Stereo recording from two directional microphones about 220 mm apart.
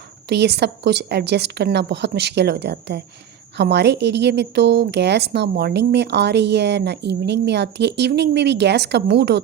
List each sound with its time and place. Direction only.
0.3 s a woman's voice: 50° right (ahead or behind)